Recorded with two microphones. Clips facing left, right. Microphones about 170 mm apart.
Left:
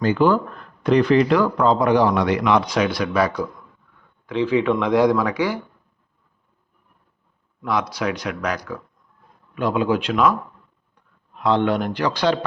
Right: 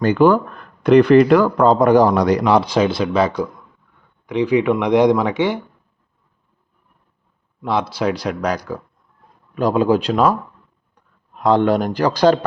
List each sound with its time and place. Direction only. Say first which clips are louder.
0.0 s speech: right 4 dB; 55° right (ahead or behind); by 5.5 s 25° right (ahead or behind)
7.6 s speech: right 3 dB; 30° right (ahead or behind)
11.3 s speech: right 4 dB; 45° right (ahead or behind)